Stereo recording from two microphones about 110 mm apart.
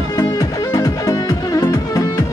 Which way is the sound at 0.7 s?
30° left (ahead or behind).